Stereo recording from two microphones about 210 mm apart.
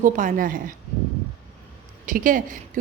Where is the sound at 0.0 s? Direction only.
40° right (ahead or behind).